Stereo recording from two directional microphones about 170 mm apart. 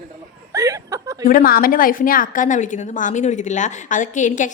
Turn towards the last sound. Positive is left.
turn(degrees=45)  # may be behind; listen again after turning